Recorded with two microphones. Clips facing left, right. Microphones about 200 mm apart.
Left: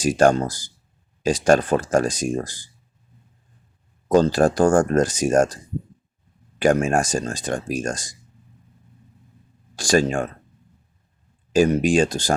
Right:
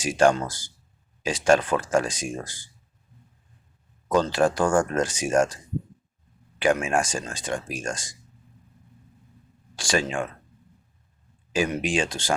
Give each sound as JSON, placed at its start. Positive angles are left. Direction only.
{"t": 0.0, "sound": "speech", "side_deg": 40}
{"t": 4.1, "sound": "speech", "side_deg": 40}
{"t": 6.6, "sound": "speech", "side_deg": 40}
{"t": 9.7, "sound": "speech", "side_deg": 40}
{"t": 11.5, "sound": "speech", "side_deg": 40}